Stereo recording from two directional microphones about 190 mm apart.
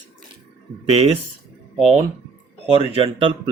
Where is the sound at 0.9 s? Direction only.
30° right (ahead or behind).